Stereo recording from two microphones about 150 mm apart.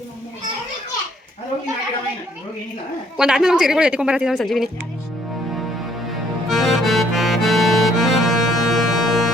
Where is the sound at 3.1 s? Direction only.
5° right (ahead or behind).